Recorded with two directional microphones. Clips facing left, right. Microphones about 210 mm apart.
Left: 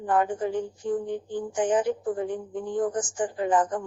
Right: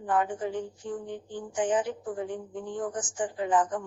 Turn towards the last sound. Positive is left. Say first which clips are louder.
# left 2 dB
turn(degrees=40)  # may be behind; listen again after turning